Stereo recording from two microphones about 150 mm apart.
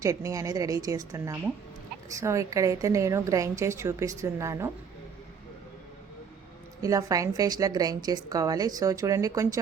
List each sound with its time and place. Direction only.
0.0 s a woman's voice: 20° right (ahead or behind)
6.8 s a woman's voice: 25° right (ahead or behind)